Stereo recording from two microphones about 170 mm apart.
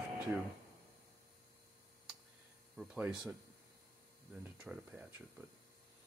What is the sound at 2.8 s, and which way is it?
Speech, 5° right (ahead or behind).